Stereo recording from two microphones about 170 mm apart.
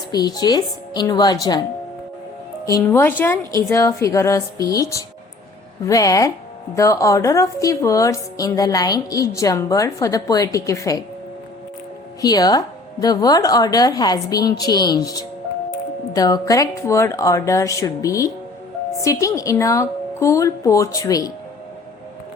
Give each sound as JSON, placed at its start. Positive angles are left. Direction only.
{"t": 0.1, "sound": "a woman's voice", "side_deg": 25}
{"t": 2.6, "sound": "a woman's voice", "side_deg": 15}
{"t": 12.2, "sound": "a woman's voice", "side_deg": 25}